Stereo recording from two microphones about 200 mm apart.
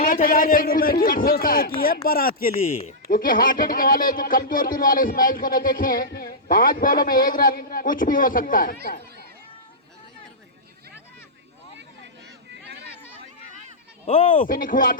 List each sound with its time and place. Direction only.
0.0 s speech: 45° left (ahead or behind)
14.1 s speech: 35° left (ahead or behind)